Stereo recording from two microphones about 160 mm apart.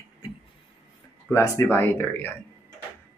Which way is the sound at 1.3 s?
15° left (ahead or behind).